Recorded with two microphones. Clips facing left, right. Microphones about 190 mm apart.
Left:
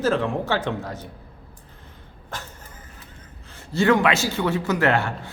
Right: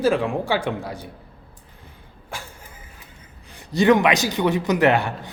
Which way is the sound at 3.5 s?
15° right (ahead or behind).